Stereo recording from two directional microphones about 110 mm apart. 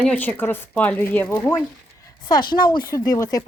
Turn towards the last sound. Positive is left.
turn(degrees=35)  # may be behind; listen again after turning